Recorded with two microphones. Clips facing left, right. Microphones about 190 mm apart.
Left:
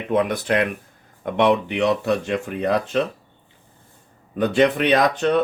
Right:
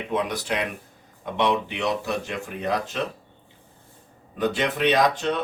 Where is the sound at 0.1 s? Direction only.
55° left (ahead or behind).